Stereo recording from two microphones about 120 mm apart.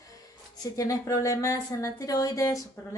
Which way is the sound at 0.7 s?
30° left (ahead or behind).